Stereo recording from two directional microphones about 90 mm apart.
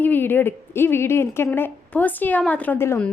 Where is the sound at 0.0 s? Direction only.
20° left (ahead or behind).